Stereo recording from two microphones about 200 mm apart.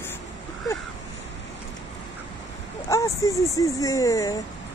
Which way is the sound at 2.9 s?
15° left (ahead or behind).